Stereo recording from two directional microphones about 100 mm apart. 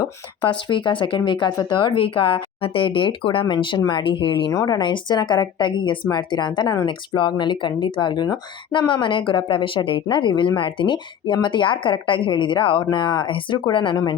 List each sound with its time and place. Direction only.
0.5 s a woman's voice: 55° left (ahead or behind)
4.5 s a woman's voice: 35° left (ahead or behind)
4.8 s a woman's voice: 50° left (ahead or behind)
13.9 s a woman's voice: 40° left (ahead or behind)